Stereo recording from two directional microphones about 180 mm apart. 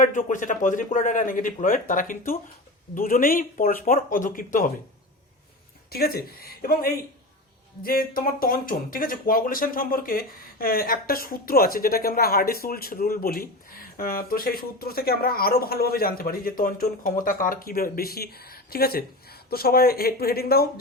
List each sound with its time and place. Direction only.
0.0 s a man's voice: 45° left (ahead or behind)
5.9 s speech: 60° left (ahead or behind)